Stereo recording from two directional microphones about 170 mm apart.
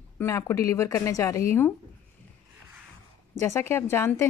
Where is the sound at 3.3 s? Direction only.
15° left (ahead or behind).